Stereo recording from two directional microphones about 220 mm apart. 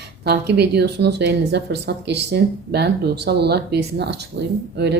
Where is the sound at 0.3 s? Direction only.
50° right (ahead or behind).